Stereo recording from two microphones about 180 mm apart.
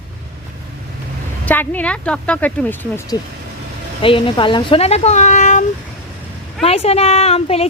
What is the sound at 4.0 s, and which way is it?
A woman's voice, 30° left (ahead or behind).